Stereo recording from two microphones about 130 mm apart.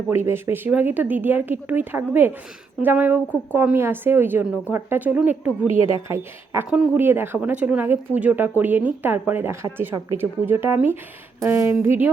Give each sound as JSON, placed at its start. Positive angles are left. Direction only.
{"t": 0.3, "sound": "speech", "side_deg": -20}
{"t": 6.7, "sound": "speech", "side_deg": -5}
{"t": 7.0, "sound": "speech", "side_deg": -15}